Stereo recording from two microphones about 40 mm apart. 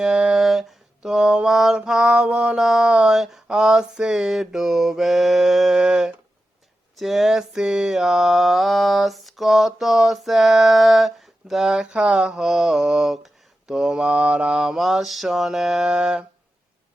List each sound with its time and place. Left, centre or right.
0.0 s mantra: centre
0.3 s a sound: centre
1.0 s mantra: centre
2.6 s mantra: centre
2.8 s mantra: right; by 5.8 s centre
6.9 s mantra: centre; by 7.9 s right
7.9 s mantra: centre
11.9 s mantra: right
12.4 s mantra: centre
14.8 s mantra: centre
15.9 s mantra: centre